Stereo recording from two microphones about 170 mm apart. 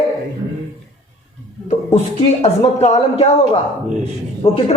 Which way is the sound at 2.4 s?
40° left (ahead or behind).